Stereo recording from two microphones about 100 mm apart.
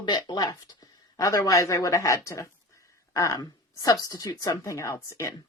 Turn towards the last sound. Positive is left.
turn(degrees=30)  # may be behind; listen again after turning